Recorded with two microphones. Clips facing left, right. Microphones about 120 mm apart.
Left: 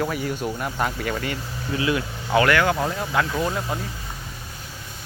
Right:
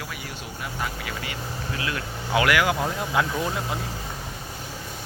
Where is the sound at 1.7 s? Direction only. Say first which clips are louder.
Left 9 dB; 20° left (ahead or behind).